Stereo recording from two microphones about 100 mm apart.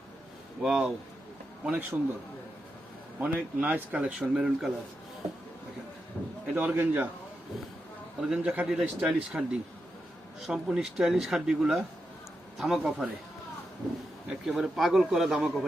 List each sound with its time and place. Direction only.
0.6 s a man's voice: 5° right (ahead or behind)
1.6 s speech: 15° right (ahead or behind)
3.2 s speech: 15° right (ahead or behind)
6.2 s a sound: 10° left (ahead or behind)
6.5 s speech: 15° right (ahead or behind)
8.3 s a man's voice: 10° right (ahead or behind)
14.3 s a man's voice: 5° right (ahead or behind)